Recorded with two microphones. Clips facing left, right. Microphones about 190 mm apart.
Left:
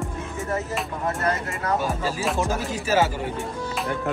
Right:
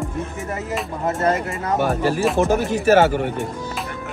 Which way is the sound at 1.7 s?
65° right (ahead or behind).